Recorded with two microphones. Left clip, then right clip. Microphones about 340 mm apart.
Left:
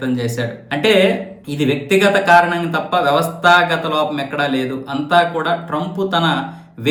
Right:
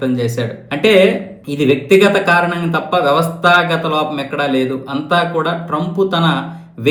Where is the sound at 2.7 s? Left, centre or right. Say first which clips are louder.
Right 4 dB; left.